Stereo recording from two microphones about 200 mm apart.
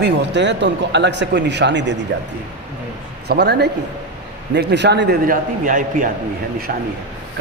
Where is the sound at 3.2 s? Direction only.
55° right (ahead or behind).